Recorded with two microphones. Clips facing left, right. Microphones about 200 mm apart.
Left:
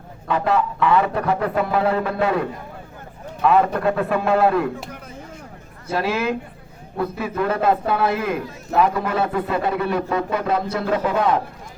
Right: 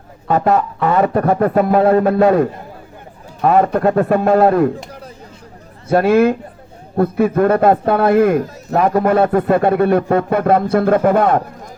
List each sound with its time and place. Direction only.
0.3 s a man's voice: 45° right (ahead or behind)
5.9 s a man's voice: 55° right (ahead or behind)